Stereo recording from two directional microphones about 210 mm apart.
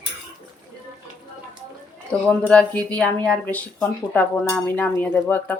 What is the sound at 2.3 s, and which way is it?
Speech, 5° left (ahead or behind).